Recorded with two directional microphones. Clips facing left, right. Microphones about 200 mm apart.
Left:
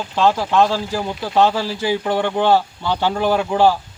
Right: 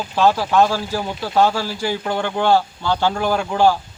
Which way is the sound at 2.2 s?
20° left (ahead or behind).